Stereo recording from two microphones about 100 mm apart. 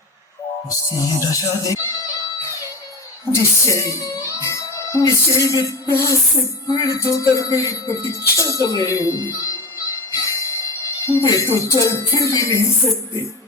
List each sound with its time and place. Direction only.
0.7 s speech: 35° left (ahead or behind)
3.3 s speech: 30° left (ahead or behind)
8.4 s a sound: 30° left (ahead or behind)
10.8 s speech: 30° left (ahead or behind)